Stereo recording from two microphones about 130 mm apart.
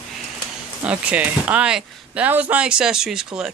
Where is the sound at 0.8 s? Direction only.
10° right (ahead or behind).